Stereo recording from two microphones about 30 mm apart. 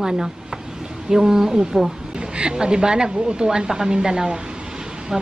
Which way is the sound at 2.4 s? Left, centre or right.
Right.